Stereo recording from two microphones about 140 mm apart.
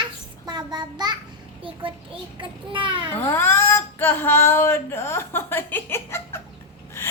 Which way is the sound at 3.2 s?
15° left (ahead or behind).